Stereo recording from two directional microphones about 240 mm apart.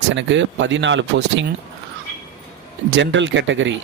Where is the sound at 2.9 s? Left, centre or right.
Right.